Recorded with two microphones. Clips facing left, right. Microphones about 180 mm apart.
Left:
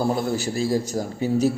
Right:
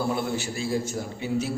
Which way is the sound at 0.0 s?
40° left (ahead or behind).